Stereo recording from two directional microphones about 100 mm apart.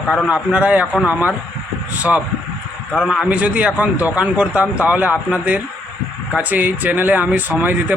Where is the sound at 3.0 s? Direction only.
10° right (ahead or behind).